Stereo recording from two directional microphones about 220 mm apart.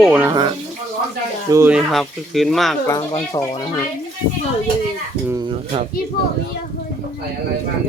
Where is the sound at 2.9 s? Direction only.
15° left (ahead or behind).